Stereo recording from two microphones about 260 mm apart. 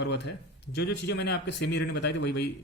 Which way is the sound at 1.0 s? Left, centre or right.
Left.